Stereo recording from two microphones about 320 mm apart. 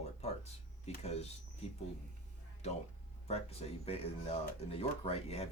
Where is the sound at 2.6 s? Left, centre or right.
Left.